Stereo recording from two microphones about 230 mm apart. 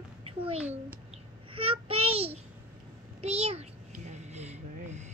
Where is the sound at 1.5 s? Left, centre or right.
Right.